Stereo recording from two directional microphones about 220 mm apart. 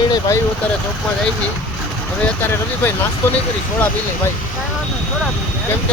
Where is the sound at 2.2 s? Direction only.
10° left (ahead or behind).